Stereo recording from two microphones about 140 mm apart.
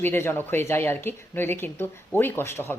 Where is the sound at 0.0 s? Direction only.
15° left (ahead or behind).